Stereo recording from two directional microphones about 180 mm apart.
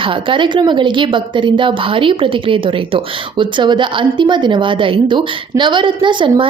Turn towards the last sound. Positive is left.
turn(degrees=-25)  # may be behind; listen again after turning